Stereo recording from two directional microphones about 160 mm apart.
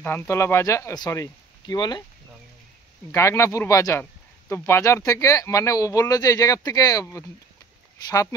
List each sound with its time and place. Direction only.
0.0 s speech: 10° left (ahead or behind)
3.1 s speech: 20° left (ahead or behind)